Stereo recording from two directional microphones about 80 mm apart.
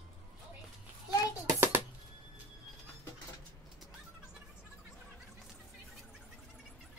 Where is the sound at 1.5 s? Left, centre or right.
Right.